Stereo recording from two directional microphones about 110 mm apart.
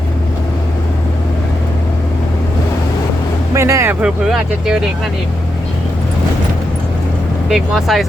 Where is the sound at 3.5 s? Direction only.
25° right (ahead or behind).